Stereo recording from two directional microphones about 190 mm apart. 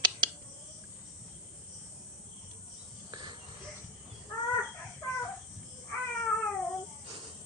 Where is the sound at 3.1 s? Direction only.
25° right (ahead or behind).